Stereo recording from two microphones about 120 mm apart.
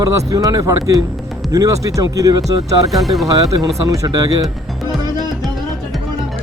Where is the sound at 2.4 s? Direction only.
Centre (ahead or behind).